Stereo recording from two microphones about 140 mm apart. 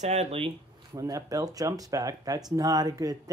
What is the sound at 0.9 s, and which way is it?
Speech, 25° right (ahead or behind).